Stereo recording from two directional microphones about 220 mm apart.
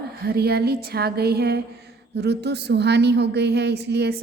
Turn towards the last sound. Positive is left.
turn(degrees=-50)  # may be behind; listen again after turning